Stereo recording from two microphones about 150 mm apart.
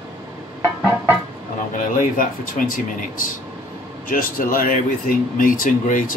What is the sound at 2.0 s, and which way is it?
Speech, 65° left (ahead or behind).